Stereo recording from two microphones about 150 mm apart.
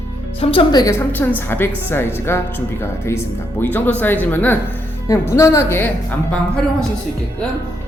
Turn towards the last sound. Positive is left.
turn(degrees=5)  # may be behind; listen again after turning